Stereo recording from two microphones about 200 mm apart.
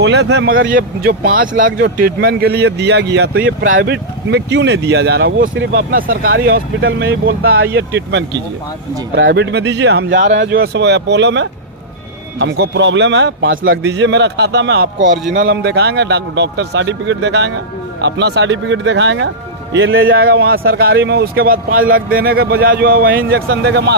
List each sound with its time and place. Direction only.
0.0 s speech: 60° right (ahead or behind)
0.7 s a man's voice: 50° right (ahead or behind)
3.6 s a man's voice: 70° right (ahead or behind)
4.3 s speech: 60° right (ahead or behind)
6.8 s speech: 60° right (ahead or behind)
10.5 s speech: 55° right (ahead or behind)
13.6 s speech: 55° right (ahead or behind)
15.3 s a man's voice: 45° right (ahead or behind); by 20.2 s 75° right (ahead or behind)
20.2 s a man's voice: 50° right (ahead or behind)